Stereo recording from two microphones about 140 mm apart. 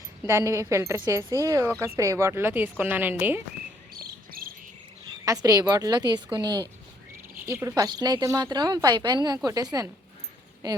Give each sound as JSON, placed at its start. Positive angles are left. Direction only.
{"t": 0.3, "sound": "speech", "side_deg": -20}
{"t": 3.9, "sound": "cricket", "side_deg": -90}
{"t": 5.2, "sound": "speech", "side_deg": -25}